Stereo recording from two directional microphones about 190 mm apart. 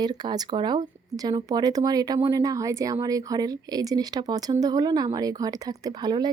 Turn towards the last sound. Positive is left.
turn(degrees=-20)  # may be behind; listen again after turning